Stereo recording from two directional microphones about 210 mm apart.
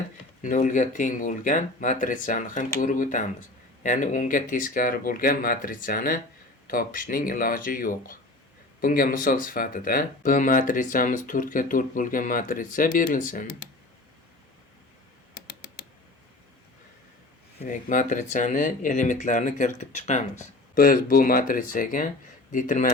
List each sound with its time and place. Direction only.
0.4 s speech: 35° left (ahead or behind)
15.4 s typing: 45° left (ahead or behind)
17.6 s speech: 35° left (ahead or behind)